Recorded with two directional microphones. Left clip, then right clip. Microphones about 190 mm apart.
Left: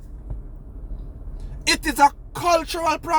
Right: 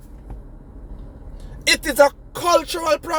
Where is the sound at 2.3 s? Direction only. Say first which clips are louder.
Right 2 dB; 5° left (ahead or behind).